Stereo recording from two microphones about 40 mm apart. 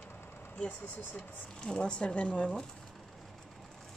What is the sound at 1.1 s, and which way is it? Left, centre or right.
Speech, left.